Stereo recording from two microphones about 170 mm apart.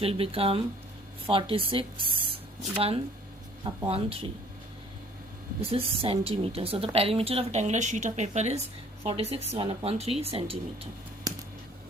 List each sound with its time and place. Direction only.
0.0 s a woman's voice: 35° right (ahead or behind)
5.7 s a woman's voice: 35° right (ahead or behind)
11.3 s a sound: 20° right (ahead or behind)